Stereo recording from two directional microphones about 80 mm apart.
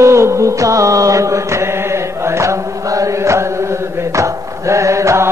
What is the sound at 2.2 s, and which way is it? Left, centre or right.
Chant, right.